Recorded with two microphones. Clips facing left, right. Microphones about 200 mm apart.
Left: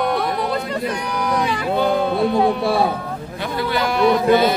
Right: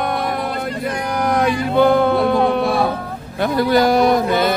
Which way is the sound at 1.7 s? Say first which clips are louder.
Right 5 dB; 60° right (ahead or behind).